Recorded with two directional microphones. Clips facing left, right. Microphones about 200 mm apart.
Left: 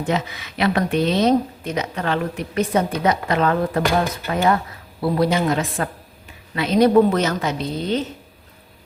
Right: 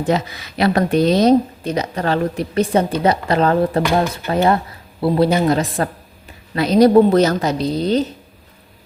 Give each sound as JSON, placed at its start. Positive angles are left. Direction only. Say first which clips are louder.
{"t": 0.0, "sound": "speech", "louder": "right 4 dB", "side_deg": -35}